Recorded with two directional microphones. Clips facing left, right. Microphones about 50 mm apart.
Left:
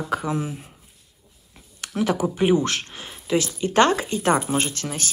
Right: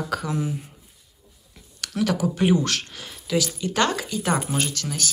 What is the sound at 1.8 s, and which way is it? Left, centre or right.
Speech, left.